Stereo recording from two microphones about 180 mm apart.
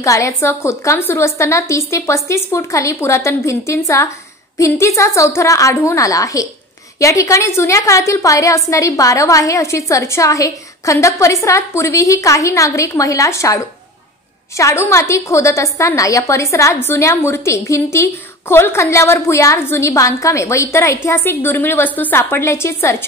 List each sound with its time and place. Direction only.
0.0 s a woman's voice: 15° left (ahead or behind)
14.6 s a woman's voice: 15° left (ahead or behind)